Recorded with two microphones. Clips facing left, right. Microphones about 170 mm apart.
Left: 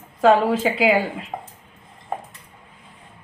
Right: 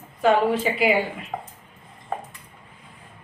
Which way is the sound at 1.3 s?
15° left (ahead or behind).